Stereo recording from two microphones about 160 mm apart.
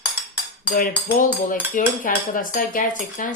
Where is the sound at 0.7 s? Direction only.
60° left (ahead or behind).